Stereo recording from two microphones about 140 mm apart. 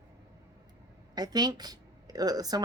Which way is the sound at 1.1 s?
30° right (ahead or behind).